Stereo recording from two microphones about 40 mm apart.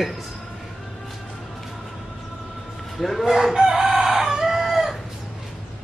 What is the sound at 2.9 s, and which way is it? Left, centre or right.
Speech, centre.